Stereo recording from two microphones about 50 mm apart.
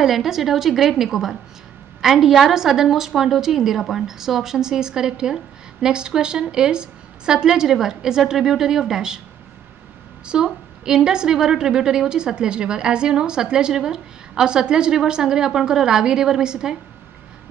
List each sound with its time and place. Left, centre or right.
0.0 s a woman's voice: centre
10.2 s a woman's voice: centre